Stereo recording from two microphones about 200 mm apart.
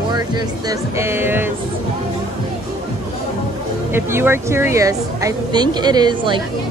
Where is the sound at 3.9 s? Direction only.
10° right (ahead or behind).